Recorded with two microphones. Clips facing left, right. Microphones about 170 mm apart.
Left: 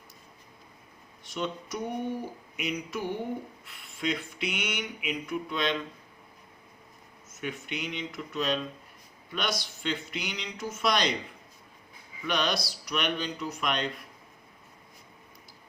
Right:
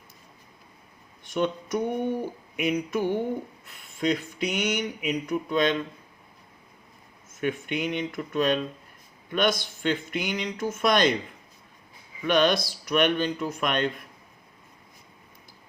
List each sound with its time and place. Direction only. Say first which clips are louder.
1.2 s speech: right 7 dB; 55° right (ahead or behind)
3.7 s mantra: right 6 dB; 45° right (ahead or behind)
7.4 s speech: right 8 dB; 50° right (ahead or behind)
12.2 s speech: right 7 dB; 50° right (ahead or behind)